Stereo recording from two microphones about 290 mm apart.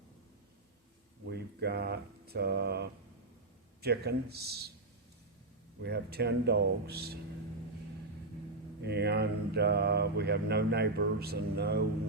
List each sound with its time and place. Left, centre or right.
1.3 s speech: right
5.8 s speech: right
8.8 s speech: right